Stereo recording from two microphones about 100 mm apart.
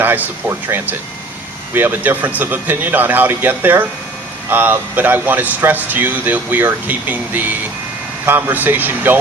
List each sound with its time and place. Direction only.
0.0 s speech: 20° right (ahead or behind)